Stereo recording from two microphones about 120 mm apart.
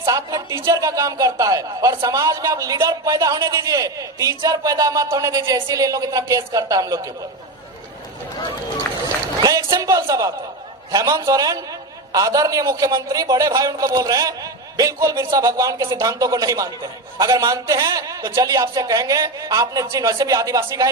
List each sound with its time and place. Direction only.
0.0 s a man's voice: 30° right (ahead or behind)
9.4 s a man's voice: 30° right (ahead or behind)